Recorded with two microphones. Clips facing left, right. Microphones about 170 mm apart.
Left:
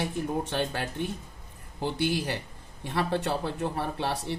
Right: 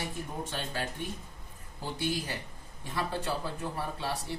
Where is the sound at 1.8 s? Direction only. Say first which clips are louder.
Left 6 dB; 70° left (ahead or behind).